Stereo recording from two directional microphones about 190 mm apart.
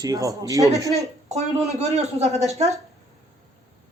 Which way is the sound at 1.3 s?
35° right (ahead or behind).